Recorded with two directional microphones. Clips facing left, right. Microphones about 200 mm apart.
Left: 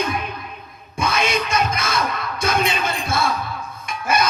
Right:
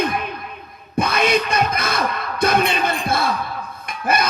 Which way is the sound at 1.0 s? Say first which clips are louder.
Right 2 dB; 55° right (ahead or behind).